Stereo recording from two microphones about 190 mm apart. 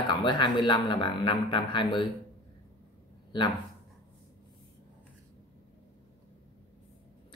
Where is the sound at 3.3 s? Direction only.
25° left (ahead or behind).